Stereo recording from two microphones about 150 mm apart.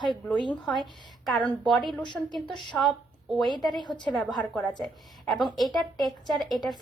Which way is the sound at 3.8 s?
30° left (ahead or behind).